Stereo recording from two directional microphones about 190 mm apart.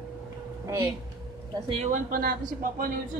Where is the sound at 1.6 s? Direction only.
35° right (ahead or behind).